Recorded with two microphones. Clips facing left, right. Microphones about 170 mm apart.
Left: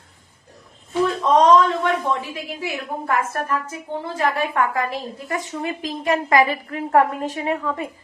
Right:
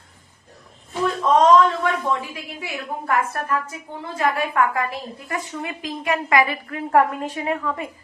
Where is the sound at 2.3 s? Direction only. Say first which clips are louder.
Left 4 dB; 40° left (ahead or behind).